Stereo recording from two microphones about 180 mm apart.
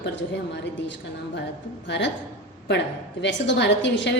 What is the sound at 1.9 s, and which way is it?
A woman's voice, 80° left.